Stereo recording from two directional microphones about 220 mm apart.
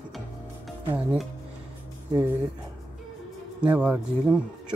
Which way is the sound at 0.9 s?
5° right (ahead or behind).